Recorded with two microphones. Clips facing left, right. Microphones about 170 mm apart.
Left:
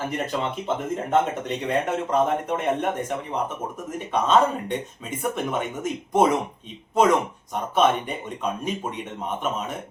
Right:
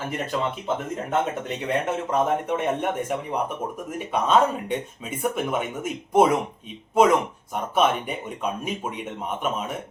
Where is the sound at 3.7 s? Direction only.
10° right (ahead or behind).